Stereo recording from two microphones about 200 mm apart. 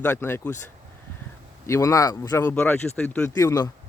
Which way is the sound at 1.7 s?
15° left (ahead or behind).